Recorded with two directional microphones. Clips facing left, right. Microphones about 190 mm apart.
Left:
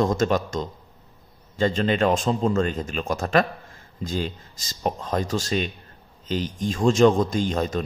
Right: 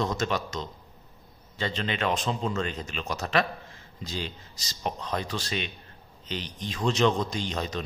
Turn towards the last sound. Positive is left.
turn(degrees=50)  # may be behind; listen again after turning